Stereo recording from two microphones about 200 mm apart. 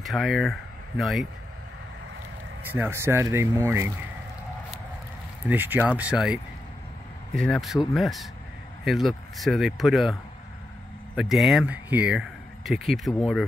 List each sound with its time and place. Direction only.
0.0 s speech: centre (ahead or behind)
2.7 s speech: 10° right (ahead or behind)
5.5 s speech: 10° right (ahead or behind)
11.1 s speech: centre (ahead or behind)